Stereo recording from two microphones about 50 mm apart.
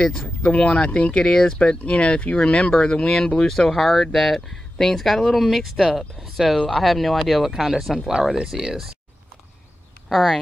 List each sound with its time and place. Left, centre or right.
0.6 s speech: centre
10.0 s speech: centre